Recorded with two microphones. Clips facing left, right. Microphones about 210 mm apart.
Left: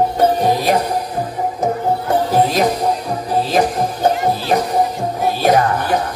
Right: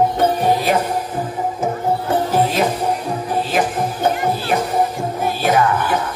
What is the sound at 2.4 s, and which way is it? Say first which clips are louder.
Music: left 2 dB; 35° left (ahead or behind).